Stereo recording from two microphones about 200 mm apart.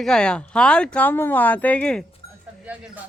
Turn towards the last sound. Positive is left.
turn(degrees=-5)  # may be behind; listen again after turning